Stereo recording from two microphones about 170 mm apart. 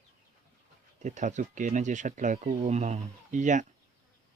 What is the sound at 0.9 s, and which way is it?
Speech, 45° right (ahead or behind).